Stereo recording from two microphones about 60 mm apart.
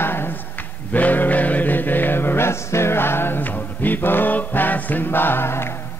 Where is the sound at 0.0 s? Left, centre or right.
Left.